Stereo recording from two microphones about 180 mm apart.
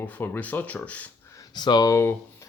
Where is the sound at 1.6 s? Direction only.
25° left (ahead or behind).